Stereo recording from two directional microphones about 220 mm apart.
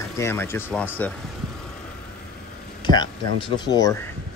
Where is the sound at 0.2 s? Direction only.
10° left (ahead or behind).